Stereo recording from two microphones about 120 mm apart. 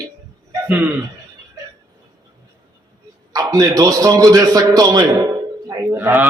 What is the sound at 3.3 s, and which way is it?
A man's voice, 30° right (ahead or behind).